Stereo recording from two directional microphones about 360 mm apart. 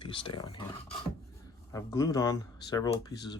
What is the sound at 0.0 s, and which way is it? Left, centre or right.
Speech, centre.